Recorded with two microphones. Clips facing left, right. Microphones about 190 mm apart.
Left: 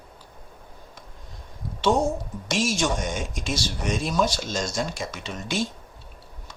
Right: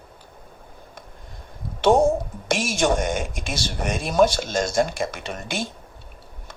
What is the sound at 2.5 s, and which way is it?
Speech, 55° right (ahead or behind).